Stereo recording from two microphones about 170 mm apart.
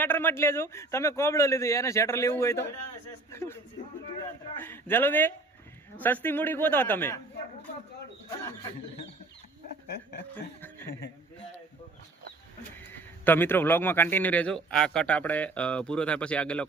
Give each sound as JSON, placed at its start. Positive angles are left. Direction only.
{"t": 0.0, "sound": "a man's voice", "side_deg": 10}
{"t": 9.8, "sound": "speech", "side_deg": 75}
{"t": 12.9, "sound": "a man's voice", "side_deg": 10}